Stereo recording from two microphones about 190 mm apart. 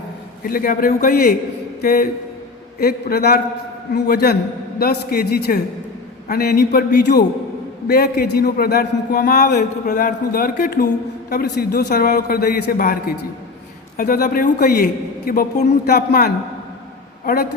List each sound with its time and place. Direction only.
0.4 s a man's voice: 50° left (ahead or behind)